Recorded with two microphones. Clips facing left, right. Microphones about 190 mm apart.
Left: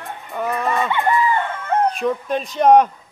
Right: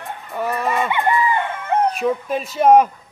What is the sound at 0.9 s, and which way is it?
Chicken, 15° right (ahead or behind).